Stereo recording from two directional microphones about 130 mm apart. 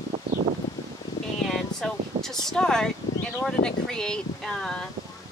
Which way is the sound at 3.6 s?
5° left (ahead or behind).